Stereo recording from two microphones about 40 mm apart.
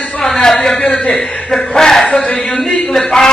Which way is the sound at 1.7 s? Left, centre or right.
Centre.